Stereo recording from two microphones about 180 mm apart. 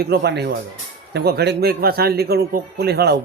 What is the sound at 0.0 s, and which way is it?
A man's voice, 65° right (ahead or behind).